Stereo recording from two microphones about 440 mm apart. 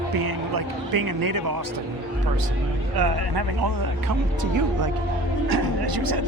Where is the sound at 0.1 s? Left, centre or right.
Right.